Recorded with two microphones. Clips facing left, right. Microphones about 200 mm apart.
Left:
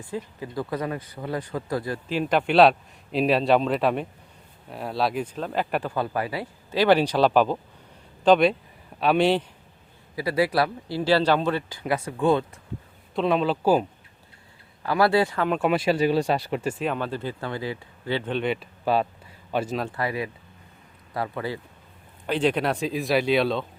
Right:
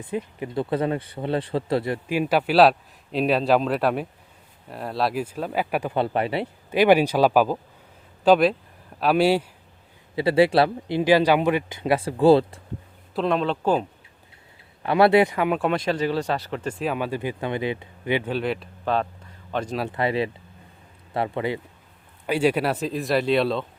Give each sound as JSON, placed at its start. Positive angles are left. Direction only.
{"t": 0.0, "sound": "speech", "side_deg": -20}
{"t": 2.0, "sound": "a man's voice", "side_deg": -10}
{"t": 5.9, "sound": "speech", "side_deg": -25}
{"t": 6.7, "sound": "a man's voice", "side_deg": -15}
{"t": 10.2, "sound": "speech", "side_deg": -25}
{"t": 13.1, "sound": "a man's voice", "side_deg": 0}
{"t": 14.8, "sound": "speech", "side_deg": -25}
{"t": 15.5, "sound": "speech", "side_deg": 5}
{"t": 16.8, "sound": "speech", "side_deg": -10}
{"t": 18.3, "sound": "a man's voice", "side_deg": 0}
{"t": 19.9, "sound": "speech", "side_deg": -25}
{"t": 22.3, "sound": "a man's voice", "side_deg": -10}